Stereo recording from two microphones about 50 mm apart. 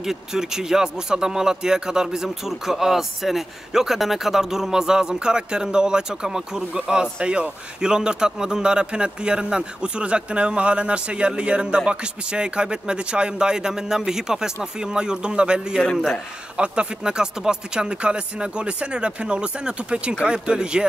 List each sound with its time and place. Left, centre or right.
0.0 s a man's voice: centre